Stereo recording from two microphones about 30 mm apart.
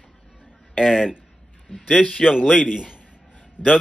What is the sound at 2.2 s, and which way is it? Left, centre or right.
Speech, right.